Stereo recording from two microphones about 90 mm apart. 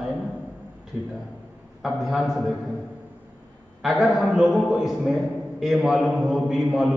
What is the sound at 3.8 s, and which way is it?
A man's voice, centre (ahead or behind).